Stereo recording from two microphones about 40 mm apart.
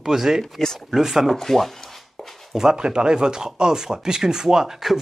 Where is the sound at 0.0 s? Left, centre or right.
Centre.